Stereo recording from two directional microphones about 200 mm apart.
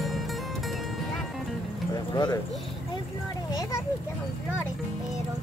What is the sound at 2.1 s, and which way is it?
Speech, 20° left (ahead or behind).